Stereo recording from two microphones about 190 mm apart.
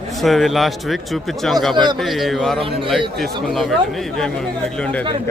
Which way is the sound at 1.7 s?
25° right (ahead or behind).